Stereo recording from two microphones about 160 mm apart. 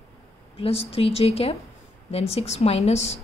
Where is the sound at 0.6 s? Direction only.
40° left (ahead or behind).